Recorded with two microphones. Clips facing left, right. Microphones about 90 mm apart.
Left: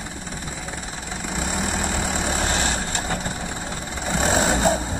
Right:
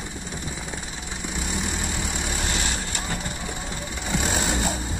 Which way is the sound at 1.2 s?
50° left (ahead or behind).